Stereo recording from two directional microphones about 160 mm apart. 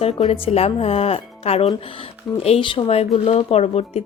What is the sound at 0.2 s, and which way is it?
A woman's voice, 35° left (ahead or behind).